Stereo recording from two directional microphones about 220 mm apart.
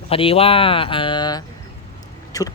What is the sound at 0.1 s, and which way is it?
Speech, 25° left (ahead or behind).